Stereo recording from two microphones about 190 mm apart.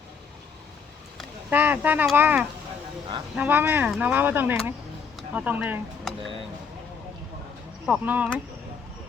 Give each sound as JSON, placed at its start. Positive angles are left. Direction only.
{"t": 1.5, "sound": "speech", "side_deg": -10}
{"t": 7.9, "sound": "speech", "side_deg": -5}